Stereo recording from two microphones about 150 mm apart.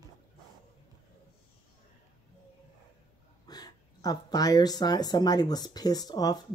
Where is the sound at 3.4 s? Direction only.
25° left (ahead or behind).